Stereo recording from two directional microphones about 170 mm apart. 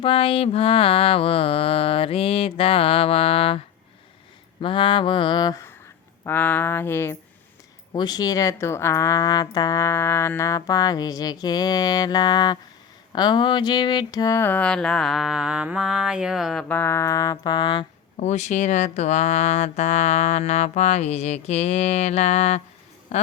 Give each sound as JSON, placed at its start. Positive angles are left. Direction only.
{"t": 0.0, "sound": "speech", "side_deg": 30}
{"t": 4.6, "sound": "speech", "side_deg": 30}
{"t": 6.2, "sound": "a sound", "side_deg": 10}
{"t": 7.9, "sound": "speech", "side_deg": 25}
{"t": 13.1, "sound": "a sound", "side_deg": 25}
{"t": 18.2, "sound": "speech", "side_deg": 45}